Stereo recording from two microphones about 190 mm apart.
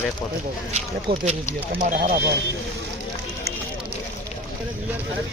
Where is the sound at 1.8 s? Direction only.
45° right (ahead or behind).